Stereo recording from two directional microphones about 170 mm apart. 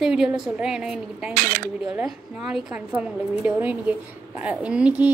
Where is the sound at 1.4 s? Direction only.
55° right (ahead or behind).